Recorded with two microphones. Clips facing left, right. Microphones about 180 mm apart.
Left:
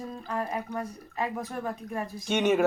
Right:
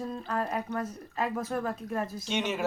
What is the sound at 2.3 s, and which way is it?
Speech, 55° left (ahead or behind).